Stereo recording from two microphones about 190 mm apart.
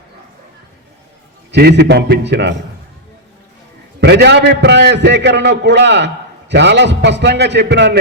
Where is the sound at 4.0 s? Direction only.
60° right (ahead or behind).